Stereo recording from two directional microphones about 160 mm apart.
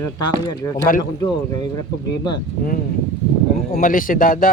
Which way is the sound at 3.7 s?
60° left (ahead or behind).